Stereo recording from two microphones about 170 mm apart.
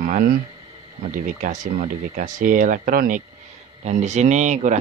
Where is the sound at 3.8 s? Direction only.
45° right (ahead or behind).